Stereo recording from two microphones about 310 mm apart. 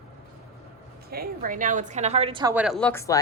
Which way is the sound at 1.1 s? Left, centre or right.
Right.